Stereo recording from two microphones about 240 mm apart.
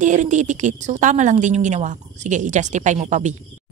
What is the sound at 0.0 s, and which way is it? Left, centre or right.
A woman's voice, right.